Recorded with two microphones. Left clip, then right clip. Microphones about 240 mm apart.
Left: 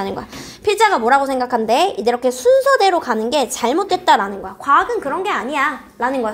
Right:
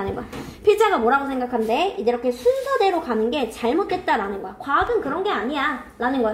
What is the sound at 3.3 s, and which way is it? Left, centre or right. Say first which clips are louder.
Speech: left 5 dB; left.